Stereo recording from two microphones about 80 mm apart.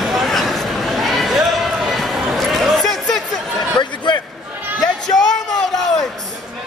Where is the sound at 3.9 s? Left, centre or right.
Left.